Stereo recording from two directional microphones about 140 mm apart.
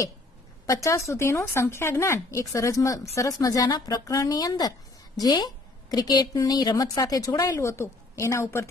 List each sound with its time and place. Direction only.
0.8 s speech: 20° left (ahead or behind)